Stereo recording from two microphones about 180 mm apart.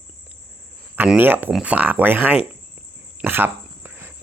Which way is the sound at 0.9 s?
10° right (ahead or behind).